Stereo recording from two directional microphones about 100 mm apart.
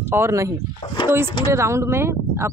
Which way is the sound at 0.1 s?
30° right (ahead or behind).